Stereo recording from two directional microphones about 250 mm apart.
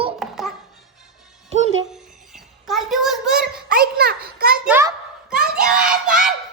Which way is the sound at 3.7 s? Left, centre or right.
Right.